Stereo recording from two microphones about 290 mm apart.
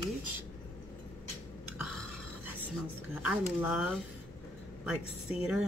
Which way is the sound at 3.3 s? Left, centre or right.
Centre.